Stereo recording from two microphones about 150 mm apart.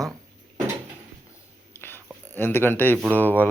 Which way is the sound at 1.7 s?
15° left (ahead or behind).